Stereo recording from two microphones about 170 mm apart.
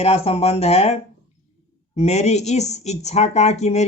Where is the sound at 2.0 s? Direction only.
40° left (ahead or behind).